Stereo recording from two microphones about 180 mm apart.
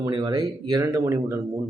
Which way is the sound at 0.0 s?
25° right (ahead or behind).